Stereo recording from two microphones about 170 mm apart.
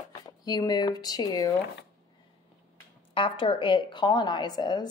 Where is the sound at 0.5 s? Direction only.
25° left (ahead or behind).